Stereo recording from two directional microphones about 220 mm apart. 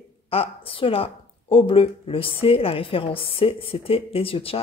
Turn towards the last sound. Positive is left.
turn(degrees=25)  # may be behind; listen again after turning